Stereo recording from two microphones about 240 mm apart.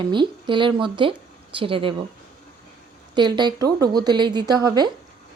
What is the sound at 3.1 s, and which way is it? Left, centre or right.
A woman's voice, centre.